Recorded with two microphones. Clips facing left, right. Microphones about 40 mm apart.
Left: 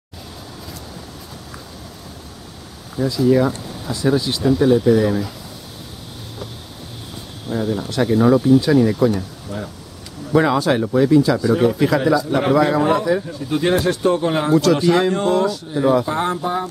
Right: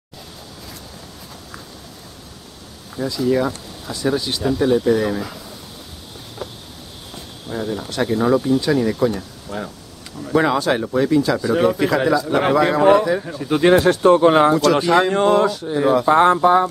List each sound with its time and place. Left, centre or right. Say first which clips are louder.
3.0 s speech: left 3 dB; centre
7.4 s speech: left 3 dB; centre
9.5 s speech: right 1 dB; right
10.3 s a man's voice: left 1 dB; centre
13.2 s speech: right 3 dB; right
14.5 s a man's voice: even; centre
15.1 s speech: right 2 dB; right
15.8 s a man's voice: left 1 dB; centre
16.1 s speech: right 8 dB; right